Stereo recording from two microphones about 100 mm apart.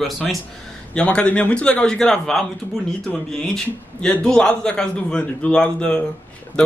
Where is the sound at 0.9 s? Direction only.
10° left (ahead or behind).